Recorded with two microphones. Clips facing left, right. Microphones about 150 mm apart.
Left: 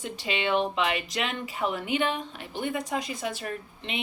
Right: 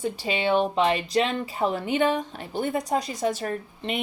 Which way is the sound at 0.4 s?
35° right (ahead or behind).